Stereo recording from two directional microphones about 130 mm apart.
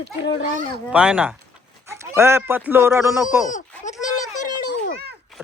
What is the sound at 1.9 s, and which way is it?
Speech, 20° right (ahead or behind).